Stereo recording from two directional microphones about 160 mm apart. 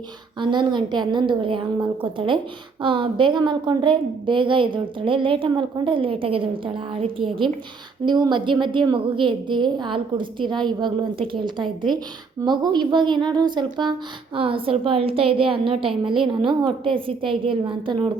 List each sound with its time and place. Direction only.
0.3 s a woman's voice: 30° right (ahead or behind)
12.4 s a woman's voice: 25° right (ahead or behind)